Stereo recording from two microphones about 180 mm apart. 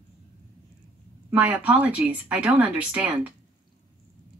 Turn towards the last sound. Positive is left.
turn(degrees=-5)  # may be behind; listen again after turning